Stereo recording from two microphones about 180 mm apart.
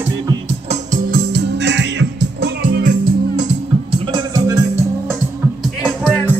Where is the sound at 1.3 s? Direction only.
70° right (ahead or behind).